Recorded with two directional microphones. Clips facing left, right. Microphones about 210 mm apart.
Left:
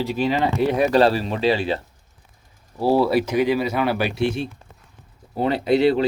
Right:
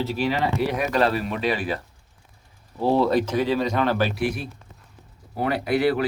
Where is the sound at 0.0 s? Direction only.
20° left (ahead or behind).